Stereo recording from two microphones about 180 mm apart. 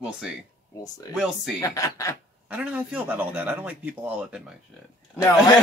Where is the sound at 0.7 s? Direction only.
20° left (ahead or behind).